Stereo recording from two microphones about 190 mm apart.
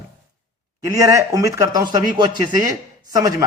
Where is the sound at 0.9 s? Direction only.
15° right (ahead or behind).